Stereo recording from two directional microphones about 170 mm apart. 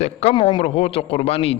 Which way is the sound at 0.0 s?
40° left (ahead or behind).